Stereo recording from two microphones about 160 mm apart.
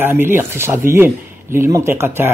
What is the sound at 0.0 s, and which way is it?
Speech, 15° right (ahead or behind).